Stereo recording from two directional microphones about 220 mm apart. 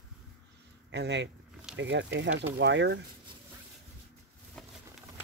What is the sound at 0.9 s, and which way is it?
Speech, 50° right (ahead or behind).